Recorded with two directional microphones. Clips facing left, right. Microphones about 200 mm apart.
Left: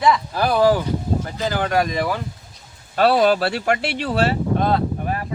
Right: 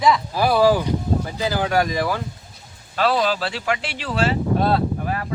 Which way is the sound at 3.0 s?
55° left (ahead or behind).